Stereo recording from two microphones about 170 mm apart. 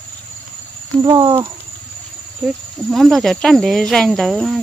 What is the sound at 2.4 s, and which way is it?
Speech, centre (ahead or behind).